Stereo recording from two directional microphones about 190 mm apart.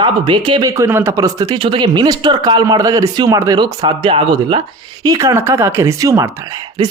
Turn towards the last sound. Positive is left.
turn(degrees=-20)  # may be behind; listen again after turning